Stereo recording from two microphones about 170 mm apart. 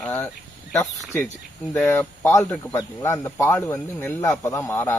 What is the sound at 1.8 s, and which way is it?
Speech, 15° left (ahead or behind).